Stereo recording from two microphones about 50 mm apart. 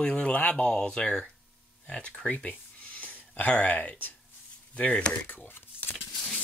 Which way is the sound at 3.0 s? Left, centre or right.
Left.